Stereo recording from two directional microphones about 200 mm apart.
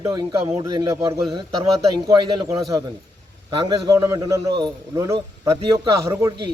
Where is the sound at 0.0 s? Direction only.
20° right (ahead or behind).